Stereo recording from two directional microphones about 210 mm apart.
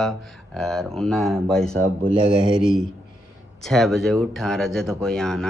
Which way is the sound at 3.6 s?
Centre (ahead or behind).